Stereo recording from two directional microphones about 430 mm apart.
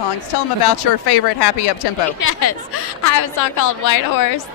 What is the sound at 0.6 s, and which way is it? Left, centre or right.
Speech, left.